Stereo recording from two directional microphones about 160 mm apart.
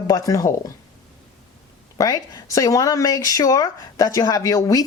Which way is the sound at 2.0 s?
20° left (ahead or behind).